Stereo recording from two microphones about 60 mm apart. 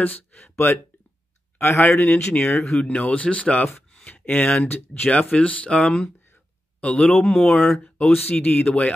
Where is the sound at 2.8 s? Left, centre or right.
Left.